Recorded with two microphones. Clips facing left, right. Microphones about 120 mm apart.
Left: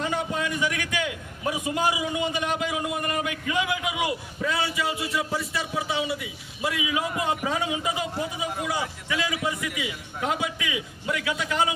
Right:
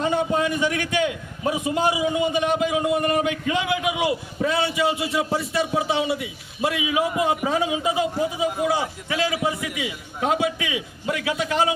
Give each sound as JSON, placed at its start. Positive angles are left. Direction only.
{"t": 0.0, "sound": "a man's voice", "side_deg": -25}